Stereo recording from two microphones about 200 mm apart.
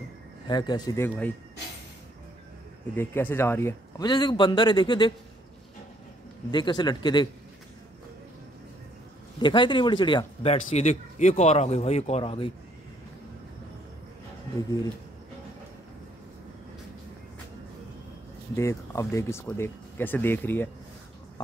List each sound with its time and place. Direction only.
0.5 s speech: 20° left (ahead or behind)
3.0 s a man's voice: 10° left (ahead or behind)
6.5 s a man's voice: 20° left (ahead or behind)
9.4 s speech: 25° left (ahead or behind)
18.6 s speech: 15° left (ahead or behind)